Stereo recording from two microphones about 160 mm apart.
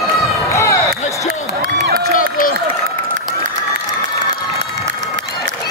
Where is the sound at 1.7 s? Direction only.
90° right.